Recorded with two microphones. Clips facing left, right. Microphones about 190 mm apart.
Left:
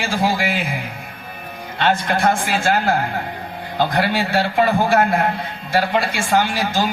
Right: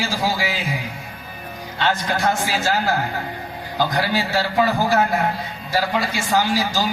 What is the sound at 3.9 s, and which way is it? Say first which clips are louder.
Speech: left 3 dB; 55° left (ahead or behind).